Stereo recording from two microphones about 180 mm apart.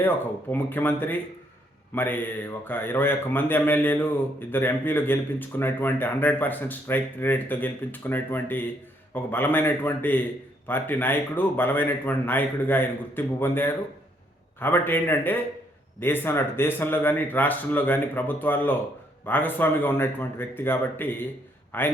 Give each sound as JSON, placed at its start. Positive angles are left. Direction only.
{"t": 0.5, "sound": "speech", "side_deg": 10}